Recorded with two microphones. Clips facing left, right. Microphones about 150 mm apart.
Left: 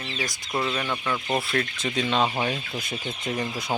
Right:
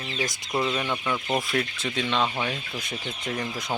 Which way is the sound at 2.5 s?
5° left (ahead or behind).